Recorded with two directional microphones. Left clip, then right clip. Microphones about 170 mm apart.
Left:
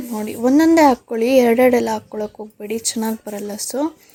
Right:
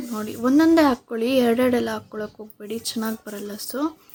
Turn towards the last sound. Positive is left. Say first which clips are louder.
# left 5 dB
turn(degrees=15)  # may be behind; listen again after turning